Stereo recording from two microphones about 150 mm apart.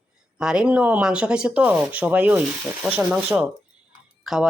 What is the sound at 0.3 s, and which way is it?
Speech, 5° right (ahead or behind).